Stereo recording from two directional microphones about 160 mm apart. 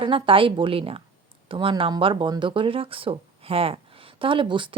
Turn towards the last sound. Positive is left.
turn(degrees=-30)  # may be behind; listen again after turning